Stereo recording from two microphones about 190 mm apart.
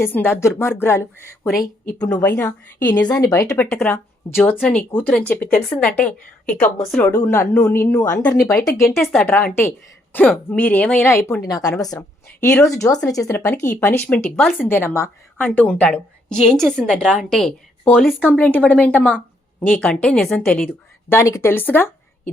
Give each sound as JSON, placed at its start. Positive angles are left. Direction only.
{"t": 0.0, "sound": "speech", "side_deg": 10}
{"t": 3.1, "sound": "speech", "side_deg": 20}
{"t": 3.5, "sound": "a woman's voice", "side_deg": 5}
{"t": 7.1, "sound": "a woman's voice", "side_deg": 15}
{"t": 21.1, "sound": "speech", "side_deg": 15}